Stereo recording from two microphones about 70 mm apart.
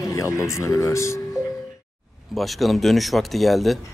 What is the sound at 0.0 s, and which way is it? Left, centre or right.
Speech, left.